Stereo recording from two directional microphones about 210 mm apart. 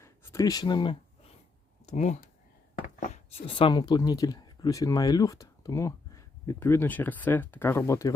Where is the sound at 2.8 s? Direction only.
35° left (ahead or behind).